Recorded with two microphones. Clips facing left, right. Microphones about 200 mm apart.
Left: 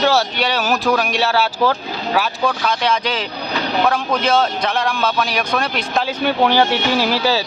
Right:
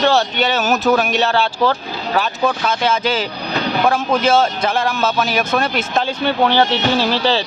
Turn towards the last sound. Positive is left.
turn(degrees=10)  # may be behind; listen again after turning